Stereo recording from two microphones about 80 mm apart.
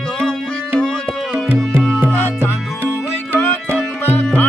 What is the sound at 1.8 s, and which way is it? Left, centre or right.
Music, centre.